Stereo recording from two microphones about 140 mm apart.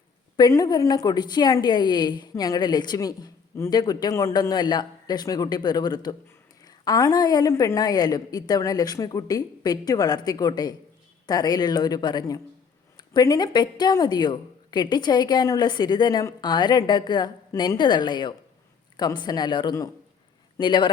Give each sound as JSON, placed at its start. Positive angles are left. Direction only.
{"t": 0.3, "sound": "a woman's voice", "side_deg": 25}